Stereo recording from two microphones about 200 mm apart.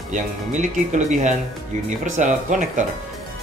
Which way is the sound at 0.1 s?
40° right (ahead or behind).